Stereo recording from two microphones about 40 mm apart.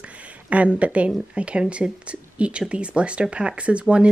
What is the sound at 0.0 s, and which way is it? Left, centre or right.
Speech, right.